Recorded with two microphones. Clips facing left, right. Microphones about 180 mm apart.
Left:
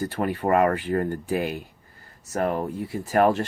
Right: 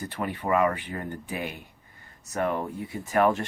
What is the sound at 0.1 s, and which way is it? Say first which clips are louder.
Speech: left 2 dB; 45° left (ahead or behind).